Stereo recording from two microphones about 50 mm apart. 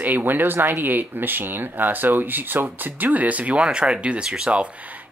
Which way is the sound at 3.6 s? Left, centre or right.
Centre.